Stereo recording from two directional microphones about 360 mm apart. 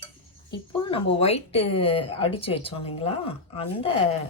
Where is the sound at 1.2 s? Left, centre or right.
Centre.